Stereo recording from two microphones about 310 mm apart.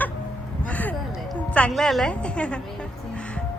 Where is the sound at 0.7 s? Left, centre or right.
Centre.